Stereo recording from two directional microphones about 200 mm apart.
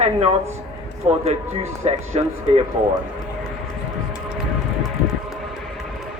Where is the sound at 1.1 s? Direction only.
30° right (ahead or behind).